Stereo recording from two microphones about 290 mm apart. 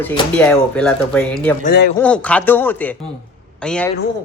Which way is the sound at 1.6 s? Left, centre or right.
Left.